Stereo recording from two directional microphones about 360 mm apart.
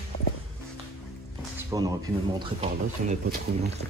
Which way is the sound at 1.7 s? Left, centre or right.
Centre.